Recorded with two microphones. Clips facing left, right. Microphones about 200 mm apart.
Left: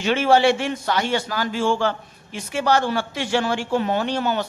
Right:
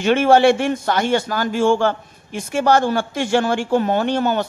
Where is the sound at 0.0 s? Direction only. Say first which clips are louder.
Right 4 dB; 50° right (ahead or behind).